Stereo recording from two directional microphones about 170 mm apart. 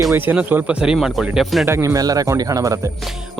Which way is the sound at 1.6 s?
15° right (ahead or behind).